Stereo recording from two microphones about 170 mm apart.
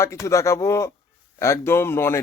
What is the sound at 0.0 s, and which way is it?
A man's voice, 15° left (ahead or behind).